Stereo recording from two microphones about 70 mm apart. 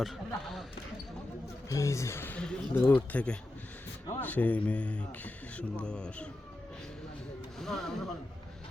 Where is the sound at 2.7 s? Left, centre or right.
Left.